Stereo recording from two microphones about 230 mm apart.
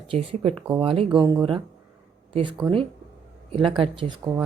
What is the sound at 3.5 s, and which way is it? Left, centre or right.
Speech, right.